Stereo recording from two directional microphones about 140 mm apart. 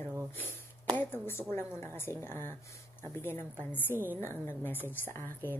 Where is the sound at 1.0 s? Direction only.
15° left (ahead or behind).